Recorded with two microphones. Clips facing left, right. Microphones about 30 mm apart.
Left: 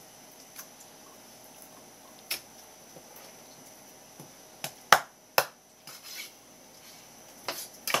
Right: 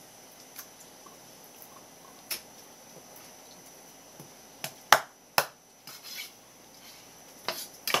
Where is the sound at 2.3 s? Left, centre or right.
Left.